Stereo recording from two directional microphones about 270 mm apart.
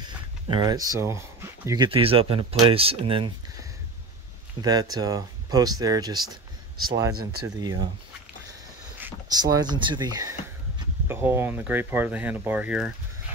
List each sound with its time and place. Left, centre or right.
0.0 s speech: centre
7.4 s speech: centre
9.0 s speech: centre